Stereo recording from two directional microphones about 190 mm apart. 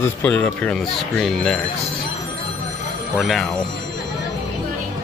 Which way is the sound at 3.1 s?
Centre (ahead or behind).